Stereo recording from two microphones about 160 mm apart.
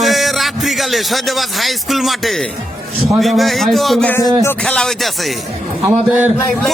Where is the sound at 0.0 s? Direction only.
Centre (ahead or behind).